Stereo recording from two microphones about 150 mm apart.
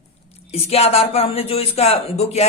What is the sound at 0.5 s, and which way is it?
A woman's voice, 45° left (ahead or behind).